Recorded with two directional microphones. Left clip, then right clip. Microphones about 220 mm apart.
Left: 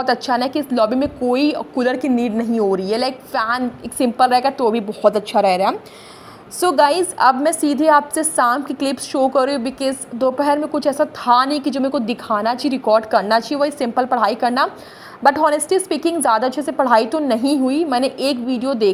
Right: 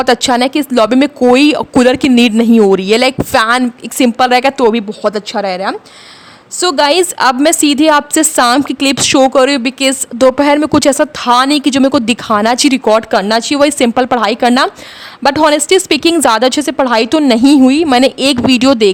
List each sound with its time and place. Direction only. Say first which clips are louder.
0.0 s a woman's voice: right 8 dB; 35° right (ahead or behind)